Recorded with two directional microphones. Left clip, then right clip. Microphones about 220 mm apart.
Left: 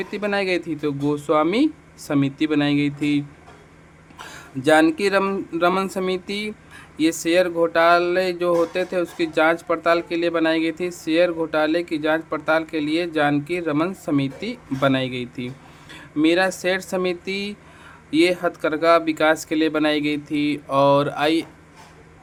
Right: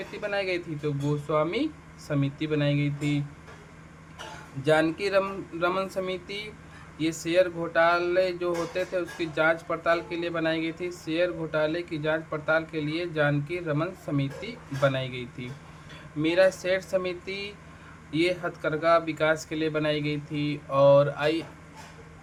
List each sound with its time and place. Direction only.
0.0 s speech: 50° left (ahead or behind)
4.6 s speech: 50° left (ahead or behind)